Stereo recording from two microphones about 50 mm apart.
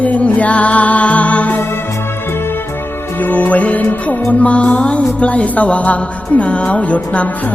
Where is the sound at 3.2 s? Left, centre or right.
Left.